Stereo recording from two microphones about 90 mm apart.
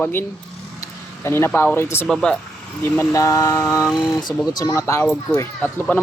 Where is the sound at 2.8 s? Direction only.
25° left (ahead or behind).